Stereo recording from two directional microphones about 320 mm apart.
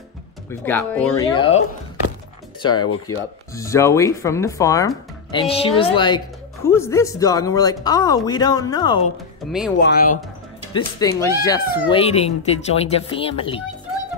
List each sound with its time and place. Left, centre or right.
0.5 s speech: centre
2.6 s speech: centre
9.8 s speech: left
10.7 s speech: centre